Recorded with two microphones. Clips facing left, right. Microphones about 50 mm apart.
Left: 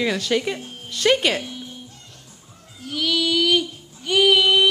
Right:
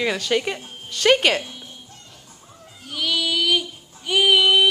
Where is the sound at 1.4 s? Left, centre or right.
Centre.